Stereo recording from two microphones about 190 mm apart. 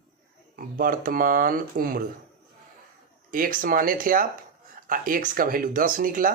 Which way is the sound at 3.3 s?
45° right (ahead or behind).